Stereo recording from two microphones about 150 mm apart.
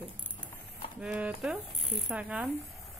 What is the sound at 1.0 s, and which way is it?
A woman's voice, 5° right (ahead or behind).